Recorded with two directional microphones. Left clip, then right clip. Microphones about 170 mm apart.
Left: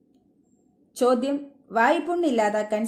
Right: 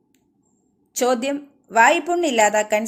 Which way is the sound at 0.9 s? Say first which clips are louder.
Right 2 dB; 15° right (ahead or behind).